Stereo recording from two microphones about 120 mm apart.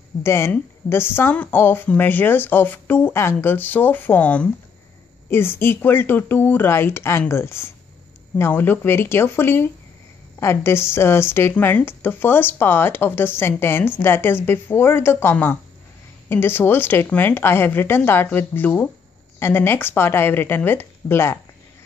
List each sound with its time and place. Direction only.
0.2 s a woman's voice: 20° left (ahead or behind)